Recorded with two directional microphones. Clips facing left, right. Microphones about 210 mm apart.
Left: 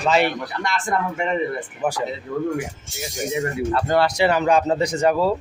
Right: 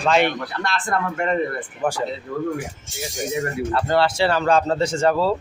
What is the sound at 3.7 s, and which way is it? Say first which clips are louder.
A man's voice: even; 15° left (ahead or behind).